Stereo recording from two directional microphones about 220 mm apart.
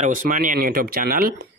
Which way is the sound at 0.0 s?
40° right (ahead or behind).